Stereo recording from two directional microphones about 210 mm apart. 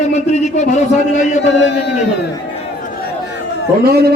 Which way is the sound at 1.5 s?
60° left (ahead or behind).